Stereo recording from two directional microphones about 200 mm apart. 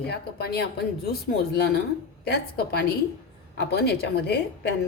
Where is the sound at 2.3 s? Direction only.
50° left (ahead or behind).